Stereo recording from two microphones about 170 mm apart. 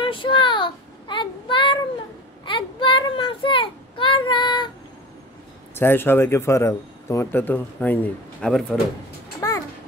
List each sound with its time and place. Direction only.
0.0 s child singing: 30° left (ahead or behind)
5.8 s speech: 10° left (ahead or behind)
9.4 s music: 15° left (ahead or behind)